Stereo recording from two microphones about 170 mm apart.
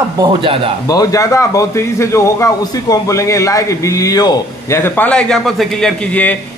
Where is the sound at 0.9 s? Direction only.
20° left (ahead or behind).